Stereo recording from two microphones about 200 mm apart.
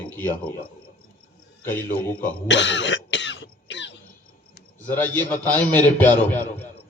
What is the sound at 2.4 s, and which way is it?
Cough, 65° left (ahead or behind).